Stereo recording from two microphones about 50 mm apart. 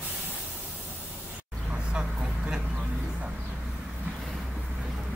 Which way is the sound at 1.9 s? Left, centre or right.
Right.